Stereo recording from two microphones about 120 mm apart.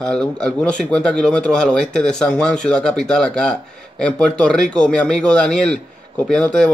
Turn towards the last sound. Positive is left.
turn(degrees=10)  # may be behind; listen again after turning